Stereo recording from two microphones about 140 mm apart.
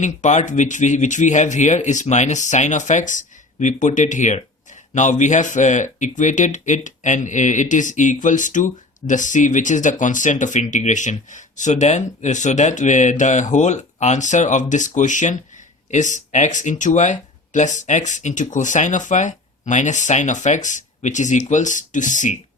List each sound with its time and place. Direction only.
0.0 s speech: 60° left (ahead or behind)